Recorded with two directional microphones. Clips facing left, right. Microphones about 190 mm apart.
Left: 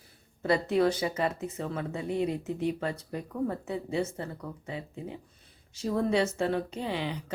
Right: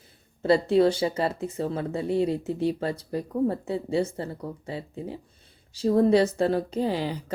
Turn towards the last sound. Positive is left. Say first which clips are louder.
# right 6 dB
turn(degrees=-40)  # may be behind; listen again after turning